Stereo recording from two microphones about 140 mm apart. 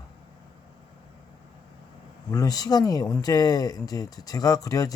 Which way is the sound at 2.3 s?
25° left (ahead or behind).